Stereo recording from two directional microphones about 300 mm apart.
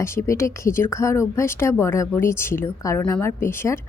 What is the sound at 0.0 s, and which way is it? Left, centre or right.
Speech, centre.